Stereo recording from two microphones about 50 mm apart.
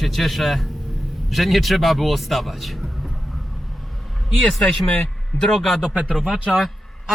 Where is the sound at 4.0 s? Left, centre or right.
Centre.